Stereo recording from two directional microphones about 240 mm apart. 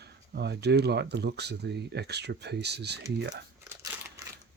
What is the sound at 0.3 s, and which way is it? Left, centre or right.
Speech, right.